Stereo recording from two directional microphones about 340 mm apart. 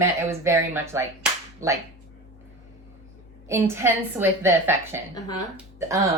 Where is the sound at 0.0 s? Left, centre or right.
Centre.